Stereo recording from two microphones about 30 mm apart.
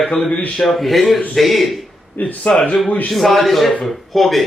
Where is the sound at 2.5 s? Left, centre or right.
Left.